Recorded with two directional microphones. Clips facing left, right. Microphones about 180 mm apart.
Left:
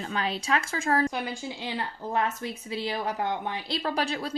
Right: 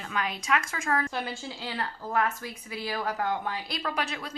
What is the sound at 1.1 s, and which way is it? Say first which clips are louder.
Speech: left 2 dB; 15° left (ahead or behind).